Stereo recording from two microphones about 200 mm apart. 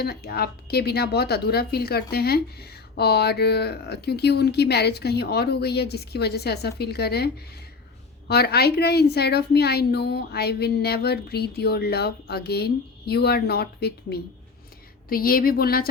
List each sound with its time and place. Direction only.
0.0 s a woman's voice: 50° left (ahead or behind)
8.3 s a woman's voice: 50° left (ahead or behind)